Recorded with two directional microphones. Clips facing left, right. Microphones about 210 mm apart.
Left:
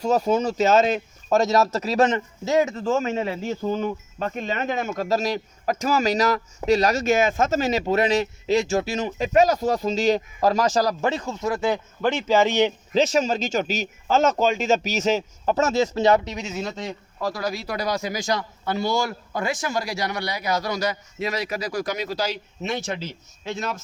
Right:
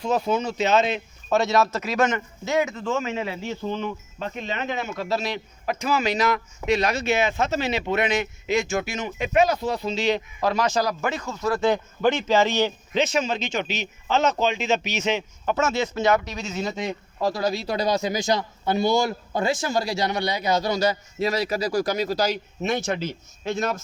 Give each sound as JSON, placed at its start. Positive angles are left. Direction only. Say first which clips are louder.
{"t": 0.0, "sound": "speech", "louder": "left 3 dB", "side_deg": 40}
{"t": 11.7, "sound": "a man's voice", "louder": "right 2 dB", "side_deg": 5}
{"t": 12.9, "sound": "speech", "louder": "left 3 dB", "side_deg": 40}
{"t": 16.5, "sound": "speech", "louder": "right 2 dB", "side_deg": 5}
{"t": 17.2, "sound": "a man's voice", "louder": "right 3 dB", "side_deg": -25}